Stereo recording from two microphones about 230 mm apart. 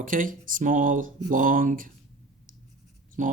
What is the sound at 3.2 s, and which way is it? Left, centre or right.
Speech, right.